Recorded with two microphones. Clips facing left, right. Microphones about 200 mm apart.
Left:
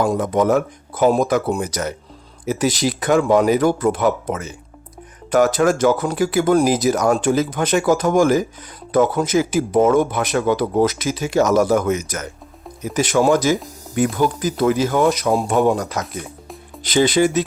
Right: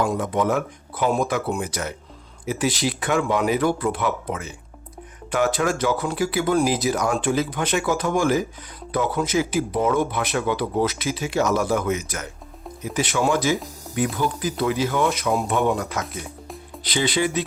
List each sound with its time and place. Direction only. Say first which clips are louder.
0.0 s speech: left 5 dB; 40° left (ahead or behind)